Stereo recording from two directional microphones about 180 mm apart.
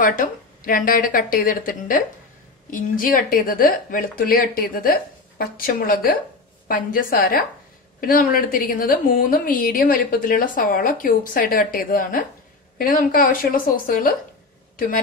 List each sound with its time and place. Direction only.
0.0 s a woman's voice: 50° left (ahead or behind)